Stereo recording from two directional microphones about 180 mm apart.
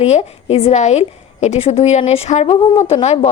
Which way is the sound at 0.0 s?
35° left (ahead or behind).